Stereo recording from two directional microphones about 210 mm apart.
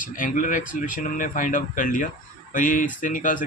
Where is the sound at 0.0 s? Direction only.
40° left (ahead or behind).